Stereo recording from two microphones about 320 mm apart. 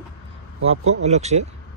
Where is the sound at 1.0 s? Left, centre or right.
Right.